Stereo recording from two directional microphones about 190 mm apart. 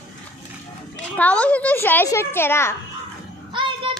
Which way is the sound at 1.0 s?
5° left (ahead or behind).